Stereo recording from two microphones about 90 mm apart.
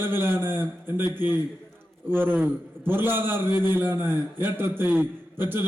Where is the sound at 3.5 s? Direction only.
50° left (ahead or behind).